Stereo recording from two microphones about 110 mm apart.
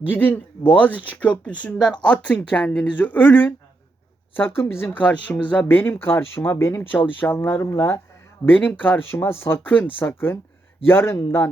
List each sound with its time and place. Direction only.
0.1 s speech: 15° left (ahead or behind)